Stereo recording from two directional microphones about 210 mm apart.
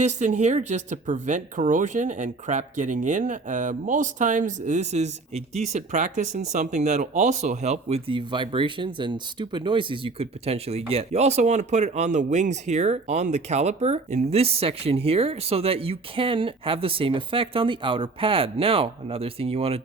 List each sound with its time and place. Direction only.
0.0 s speech: 35° right (ahead or behind)